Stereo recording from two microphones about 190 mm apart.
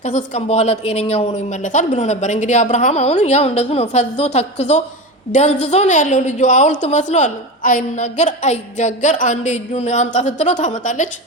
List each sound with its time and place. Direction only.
0.0 s a woman's voice: 40° left (ahead or behind)